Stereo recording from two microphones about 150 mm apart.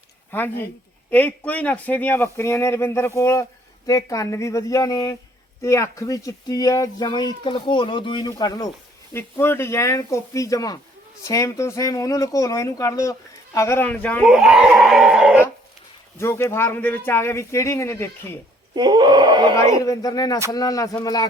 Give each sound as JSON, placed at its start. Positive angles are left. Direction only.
{"t": 0.3, "sound": "speech", "side_deg": 15}
{"t": 9.1, "sound": "speech", "side_deg": 15}
{"t": 14.3, "sound": "speech", "side_deg": -5}
{"t": 16.1, "sound": "speech", "side_deg": 15}
{"t": 18.7, "sound": "speech", "side_deg": -30}
{"t": 19.8, "sound": "speech", "side_deg": 25}